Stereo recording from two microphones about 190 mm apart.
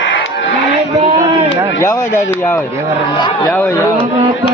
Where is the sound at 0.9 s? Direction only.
35° right (ahead or behind).